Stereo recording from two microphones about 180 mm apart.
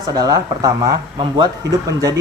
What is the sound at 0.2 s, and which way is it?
Speech, 20° right (ahead or behind).